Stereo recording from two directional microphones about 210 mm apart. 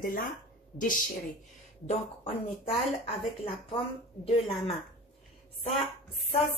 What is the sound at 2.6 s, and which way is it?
Speech, 30° left (ahead or behind).